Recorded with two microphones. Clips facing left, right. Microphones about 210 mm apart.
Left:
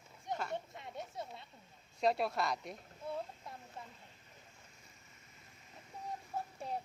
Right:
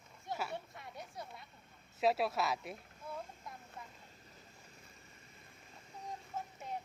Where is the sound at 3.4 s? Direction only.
30° left (ahead or behind).